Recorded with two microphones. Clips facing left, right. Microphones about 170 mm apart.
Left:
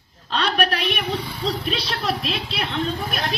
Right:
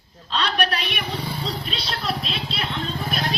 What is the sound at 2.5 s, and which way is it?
Speech, 50° left (ahead or behind).